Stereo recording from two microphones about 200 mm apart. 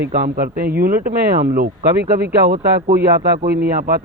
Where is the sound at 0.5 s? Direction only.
50° right (ahead or behind).